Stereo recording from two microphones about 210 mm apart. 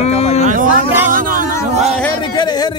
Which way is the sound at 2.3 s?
20° left (ahead or behind).